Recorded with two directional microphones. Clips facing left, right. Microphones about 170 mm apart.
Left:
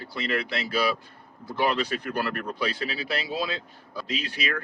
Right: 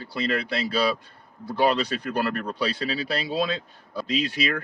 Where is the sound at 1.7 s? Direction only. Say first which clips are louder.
Right 2 dB; 35° right (ahead or behind).